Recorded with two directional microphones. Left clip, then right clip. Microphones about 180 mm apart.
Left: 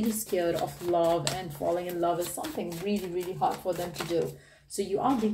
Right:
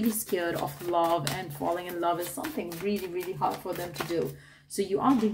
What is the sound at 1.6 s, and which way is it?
Speech, 60° right (ahead or behind).